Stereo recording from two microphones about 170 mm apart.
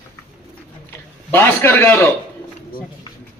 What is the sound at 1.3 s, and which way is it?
Speech, 10° left (ahead or behind).